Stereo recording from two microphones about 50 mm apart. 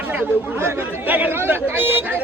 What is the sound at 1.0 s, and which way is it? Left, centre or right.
Speech, right.